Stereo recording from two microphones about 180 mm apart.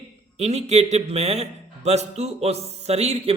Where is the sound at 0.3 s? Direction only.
40° right (ahead or behind).